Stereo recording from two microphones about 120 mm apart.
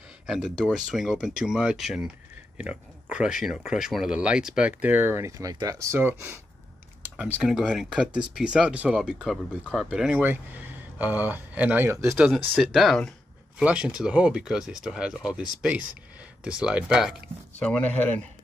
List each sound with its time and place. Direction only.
0.3 s speech: 5° right (ahead or behind)
5.4 s speech: 30° right (ahead or behind)
7.0 s computer keyboard: 15° right (ahead or behind)
7.4 s speech: centre (ahead or behind)
9.0 s speech: centre (ahead or behind); by 12.2 s 25° right (ahead or behind)
12.5 s speech: centre (ahead or behind)
13.6 s speech: 5° right (ahead or behind)
17.6 s speech: 10° left (ahead or behind)